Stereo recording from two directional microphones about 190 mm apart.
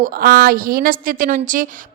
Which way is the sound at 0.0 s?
55° right (ahead or behind).